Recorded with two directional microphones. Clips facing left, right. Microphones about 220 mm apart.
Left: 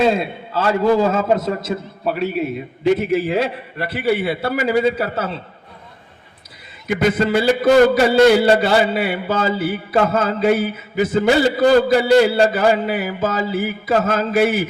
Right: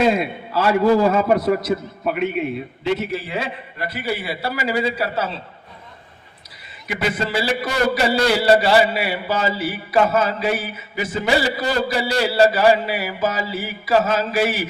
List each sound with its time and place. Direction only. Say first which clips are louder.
0.0 s a man's voice: left 1 dB; 30° left (ahead or behind); by 3.1 s 45° left (ahead or behind)
3.8 s a man's voice: left 7 dB; 60° left (ahead or behind)
6.8 s a man's voice: left 6 dB; 50° left (ahead or behind)